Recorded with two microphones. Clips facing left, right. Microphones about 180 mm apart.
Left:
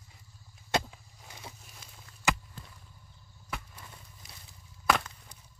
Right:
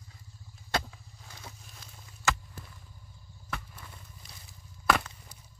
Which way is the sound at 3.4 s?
10° left (ahead or behind).